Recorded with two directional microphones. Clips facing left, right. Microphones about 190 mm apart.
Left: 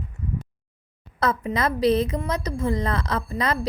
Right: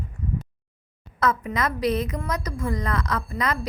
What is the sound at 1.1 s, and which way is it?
A woman's voice, 30° left (ahead or behind).